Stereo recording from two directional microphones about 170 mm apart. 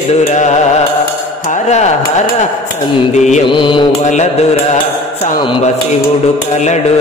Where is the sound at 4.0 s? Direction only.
45° left (ahead or behind).